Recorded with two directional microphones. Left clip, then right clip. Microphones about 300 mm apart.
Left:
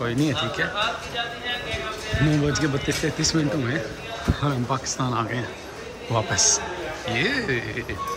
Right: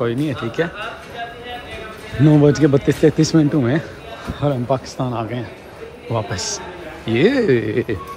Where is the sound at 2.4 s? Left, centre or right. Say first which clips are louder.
Right 10 dB; centre.